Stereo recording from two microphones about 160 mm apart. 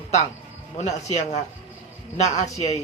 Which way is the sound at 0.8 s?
45° left (ahead or behind).